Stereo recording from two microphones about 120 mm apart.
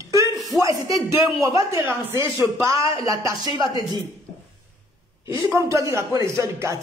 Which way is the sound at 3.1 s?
30° right (ahead or behind).